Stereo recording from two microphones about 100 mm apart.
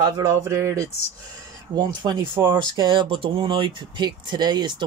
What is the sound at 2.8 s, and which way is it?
Speech, 55° right (ahead or behind).